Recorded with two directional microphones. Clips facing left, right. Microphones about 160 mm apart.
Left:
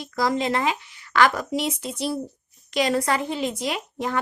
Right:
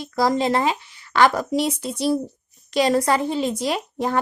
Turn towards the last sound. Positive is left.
turn(degrees=-35)  # may be behind; listen again after turning